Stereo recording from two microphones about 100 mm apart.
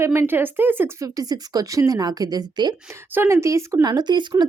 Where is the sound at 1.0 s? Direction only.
35° right (ahead or behind).